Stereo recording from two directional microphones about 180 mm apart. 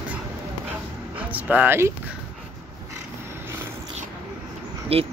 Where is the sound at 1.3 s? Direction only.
10° right (ahead or behind).